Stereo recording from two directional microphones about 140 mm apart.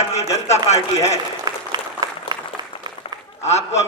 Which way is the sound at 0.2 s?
50° left (ahead or behind).